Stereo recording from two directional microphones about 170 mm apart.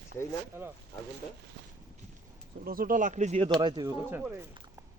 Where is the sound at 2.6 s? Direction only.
55° right (ahead or behind).